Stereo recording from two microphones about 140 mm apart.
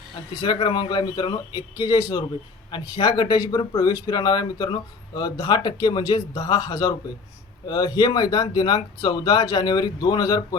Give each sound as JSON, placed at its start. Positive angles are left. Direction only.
{"t": 0.3, "sound": "speech", "side_deg": 35}